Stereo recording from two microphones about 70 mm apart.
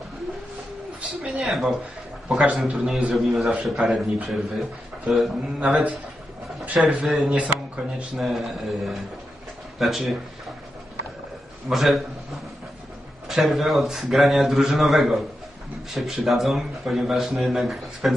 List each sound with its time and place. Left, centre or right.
1.4 s a man's voice: centre
2.2 s a man's voice: centre
7.2 s speech: centre
8.2 s a man's voice: centre
11.7 s a man's voice: centre
13.3 s a man's voice: centre